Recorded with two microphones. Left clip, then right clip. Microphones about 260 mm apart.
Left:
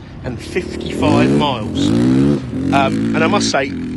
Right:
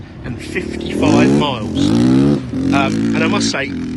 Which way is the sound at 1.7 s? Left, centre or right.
Centre.